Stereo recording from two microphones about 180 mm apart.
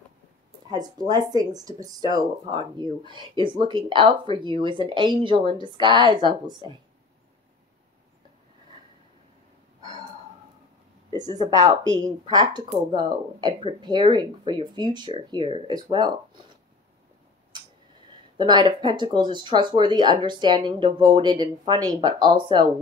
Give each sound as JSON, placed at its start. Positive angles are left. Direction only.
{"t": 0.7, "sound": "speech", "side_deg": -25}
{"t": 11.1, "sound": "speech", "side_deg": -20}
{"t": 18.4, "sound": "speech", "side_deg": -25}